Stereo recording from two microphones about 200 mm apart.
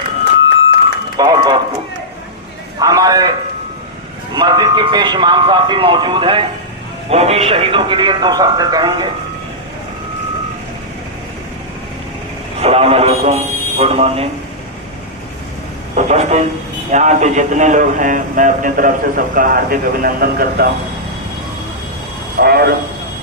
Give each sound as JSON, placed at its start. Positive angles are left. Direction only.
{"t": 1.1, "sound": "speech", "side_deg": -20}
{"t": 2.7, "sound": "a man's voice", "side_deg": -20}
{"t": 4.4, "sound": "speech", "side_deg": -20}
{"t": 12.5, "sound": "a man's voice", "side_deg": -30}
{"t": 16.0, "sound": "speech", "side_deg": -35}
{"t": 22.4, "sound": "a sound", "side_deg": -50}